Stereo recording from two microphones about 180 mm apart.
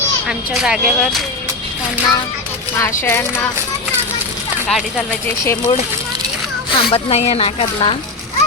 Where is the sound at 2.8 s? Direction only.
15° left (ahead or behind).